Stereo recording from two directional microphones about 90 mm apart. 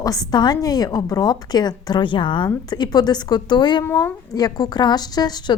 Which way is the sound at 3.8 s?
25° left (ahead or behind).